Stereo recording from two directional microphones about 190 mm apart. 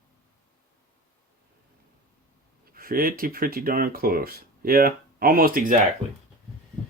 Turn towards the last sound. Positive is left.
turn(degrees=-45)  # may be behind; listen again after turning